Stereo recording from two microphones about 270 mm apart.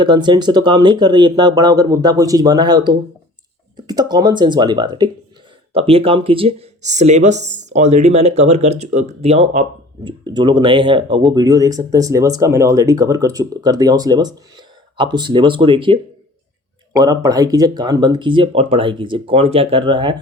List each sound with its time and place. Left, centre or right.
0.0 s speech: centre